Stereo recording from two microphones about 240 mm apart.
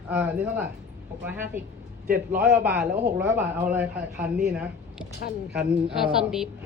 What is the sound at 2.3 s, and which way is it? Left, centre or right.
Speech, right.